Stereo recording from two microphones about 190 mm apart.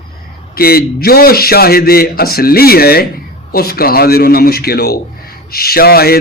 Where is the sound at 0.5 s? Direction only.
50° left (ahead or behind).